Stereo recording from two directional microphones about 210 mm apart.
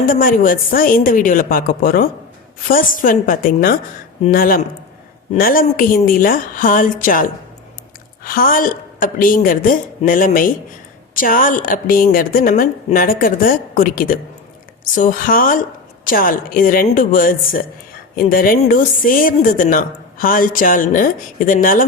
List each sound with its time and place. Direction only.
0.1 s a woman's voice: 40° left (ahead or behind)